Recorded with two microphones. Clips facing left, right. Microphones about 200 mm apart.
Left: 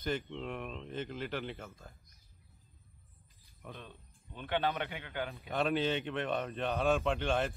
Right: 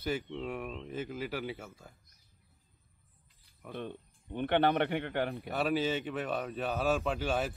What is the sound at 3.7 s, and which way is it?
Speech, 55° right (ahead or behind).